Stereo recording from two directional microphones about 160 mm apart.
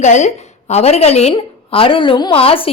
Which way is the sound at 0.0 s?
45° left (ahead or behind).